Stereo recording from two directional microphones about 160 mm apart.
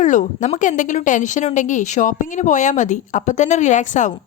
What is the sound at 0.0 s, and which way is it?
A woman's voice, 50° left (ahead or behind).